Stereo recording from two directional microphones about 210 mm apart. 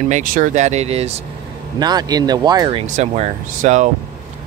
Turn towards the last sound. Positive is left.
turn(degrees=-35)  # may be behind; listen again after turning